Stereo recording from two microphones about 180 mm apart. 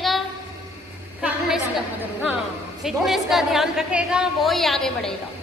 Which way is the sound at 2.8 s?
5° right (ahead or behind).